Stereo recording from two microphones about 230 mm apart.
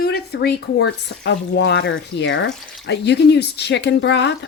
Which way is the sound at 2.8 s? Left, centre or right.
Left.